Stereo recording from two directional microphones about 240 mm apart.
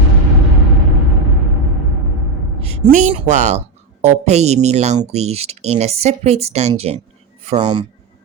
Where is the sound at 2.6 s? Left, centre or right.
Right.